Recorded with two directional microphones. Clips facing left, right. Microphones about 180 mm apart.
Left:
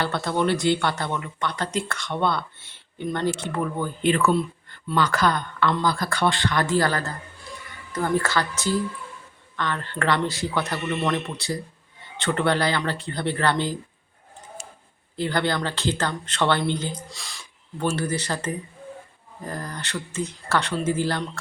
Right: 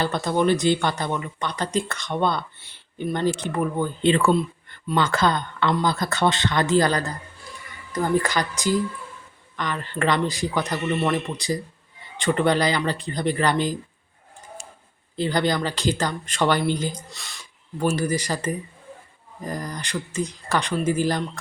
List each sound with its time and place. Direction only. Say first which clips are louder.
0.0 s speech: right 2 dB; 15° right (ahead or behind)
4.0 s speech: right 1 dB; 25° right (ahead or behind)
15.1 s speech: right 2 dB; 20° right (ahead or behind)
17.1 s speech: left 1 dB; centre (ahead or behind)